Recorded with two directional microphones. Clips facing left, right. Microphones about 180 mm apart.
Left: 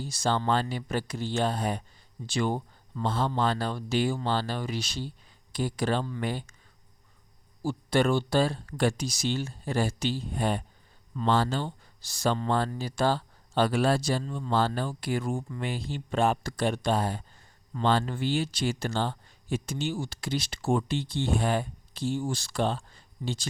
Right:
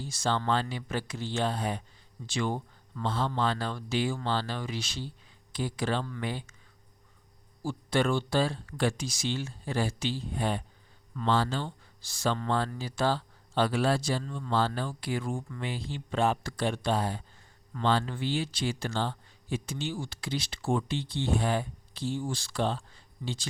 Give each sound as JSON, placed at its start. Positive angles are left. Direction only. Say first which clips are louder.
{"t": 0.1, "sound": "speech", "louder": "left 2 dB", "side_deg": 35}
{"t": 7.6, "sound": "speech", "louder": "left 3 dB", "side_deg": 40}